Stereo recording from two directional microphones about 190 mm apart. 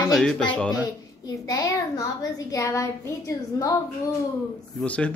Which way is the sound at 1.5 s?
20° left (ahead or behind).